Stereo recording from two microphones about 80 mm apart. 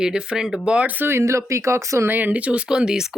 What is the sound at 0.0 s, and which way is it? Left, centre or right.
Speech, centre.